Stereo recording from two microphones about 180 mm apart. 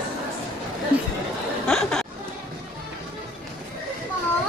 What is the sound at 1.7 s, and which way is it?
Chatter, 5° left (ahead or behind).